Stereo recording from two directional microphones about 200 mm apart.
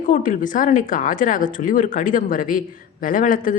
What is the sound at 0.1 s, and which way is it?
Speech, 40° left (ahead or behind).